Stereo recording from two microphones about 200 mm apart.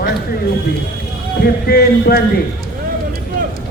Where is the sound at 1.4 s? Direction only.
50° left (ahead or behind).